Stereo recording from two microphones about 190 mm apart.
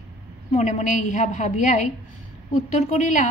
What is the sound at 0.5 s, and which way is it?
A woman's voice, 40° left (ahead or behind).